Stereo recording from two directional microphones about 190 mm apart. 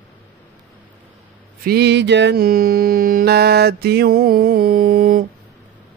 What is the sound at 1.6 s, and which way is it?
Mantra, 55° right (ahead or behind).